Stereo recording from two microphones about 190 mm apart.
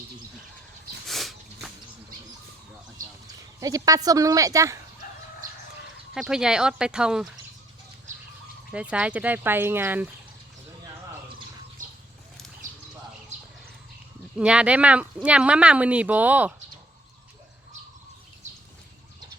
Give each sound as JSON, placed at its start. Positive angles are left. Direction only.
{"t": 1.0, "sound": "a sound", "side_deg": 0}
{"t": 3.6, "sound": "speech", "side_deg": -20}
{"t": 6.1, "sound": "speech", "side_deg": 0}
{"t": 8.7, "sound": "speech", "side_deg": -5}
{"t": 11.8, "sound": "a sound", "side_deg": -45}
{"t": 14.3, "sound": "speech", "side_deg": -5}